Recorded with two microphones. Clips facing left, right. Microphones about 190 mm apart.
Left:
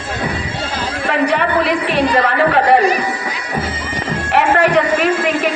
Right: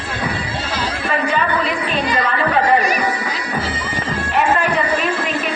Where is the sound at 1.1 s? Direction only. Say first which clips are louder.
Left 4 dB; 70° left (ahead or behind).